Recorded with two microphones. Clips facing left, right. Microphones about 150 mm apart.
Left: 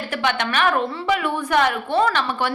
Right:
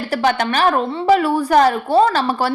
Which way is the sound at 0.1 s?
40° right (ahead or behind).